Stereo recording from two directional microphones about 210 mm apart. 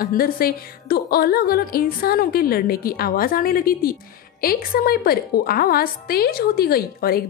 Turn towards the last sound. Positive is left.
turn(degrees=45)  # may be behind; listen again after turning